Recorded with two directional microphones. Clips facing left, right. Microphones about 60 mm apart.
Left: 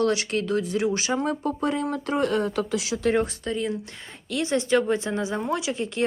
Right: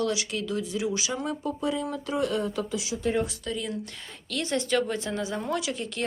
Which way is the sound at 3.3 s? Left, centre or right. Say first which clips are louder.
Left 5 dB; left.